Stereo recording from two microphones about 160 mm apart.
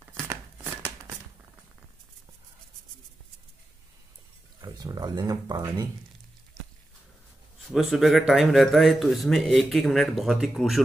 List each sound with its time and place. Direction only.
0.0 s a sound: 15° right (ahead or behind)
4.6 s speech: 25° right (ahead or behind)
7.6 s speech: centre (ahead or behind)